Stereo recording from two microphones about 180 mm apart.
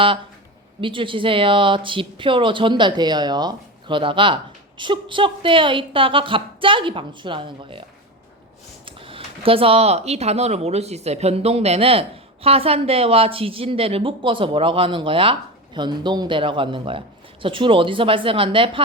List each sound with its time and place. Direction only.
0.8 s speech: 30° right (ahead or behind)